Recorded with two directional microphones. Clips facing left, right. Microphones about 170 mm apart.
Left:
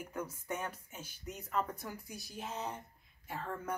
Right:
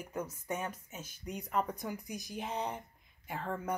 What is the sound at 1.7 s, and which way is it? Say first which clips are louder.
Speech: right 5 dB; 15° right (ahead or behind).